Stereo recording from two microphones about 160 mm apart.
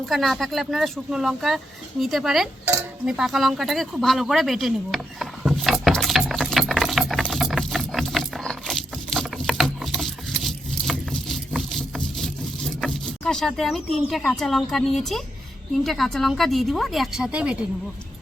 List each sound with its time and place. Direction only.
0.0 s speech: centre (ahead or behind)
3.1 s a sound: 5° right (ahead or behind)
15.8 s speech: centre (ahead or behind)